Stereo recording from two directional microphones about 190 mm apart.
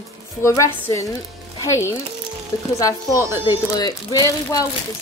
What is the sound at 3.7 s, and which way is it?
Speech, 20° left (ahead or behind).